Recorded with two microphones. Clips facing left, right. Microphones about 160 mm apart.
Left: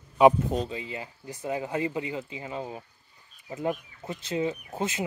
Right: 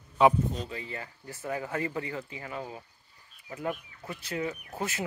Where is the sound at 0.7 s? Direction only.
20° left (ahead or behind).